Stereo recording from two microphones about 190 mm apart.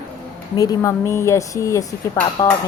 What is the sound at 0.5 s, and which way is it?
Speech, 20° left (ahead or behind).